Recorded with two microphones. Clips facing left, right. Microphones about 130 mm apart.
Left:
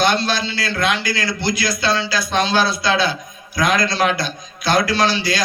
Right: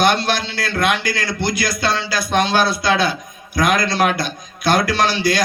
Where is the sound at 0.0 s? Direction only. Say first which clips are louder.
Right 1 dB; 55° right (ahead or behind).